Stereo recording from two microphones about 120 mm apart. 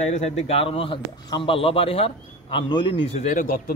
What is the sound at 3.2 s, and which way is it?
Speech, 90° left.